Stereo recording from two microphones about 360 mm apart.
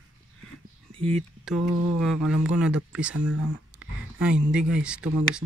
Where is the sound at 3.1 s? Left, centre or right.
Right.